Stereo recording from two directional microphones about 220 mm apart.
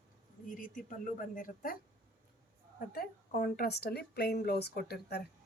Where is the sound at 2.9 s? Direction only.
40° left (ahead or behind).